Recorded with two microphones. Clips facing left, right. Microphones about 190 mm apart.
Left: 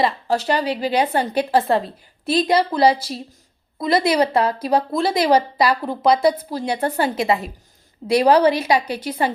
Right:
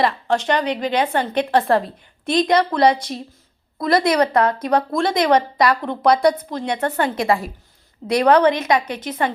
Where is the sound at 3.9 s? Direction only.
30° left (ahead or behind).